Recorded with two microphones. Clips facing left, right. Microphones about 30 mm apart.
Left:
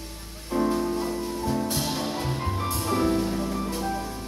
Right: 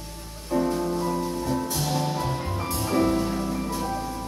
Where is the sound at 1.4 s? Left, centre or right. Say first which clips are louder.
Even; left.